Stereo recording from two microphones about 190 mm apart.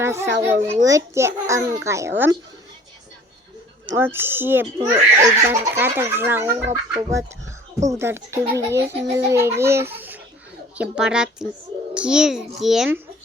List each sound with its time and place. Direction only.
0.0 s a child's voice: 15° right (ahead or behind)
3.8 s a child's voice: 10° right (ahead or behind)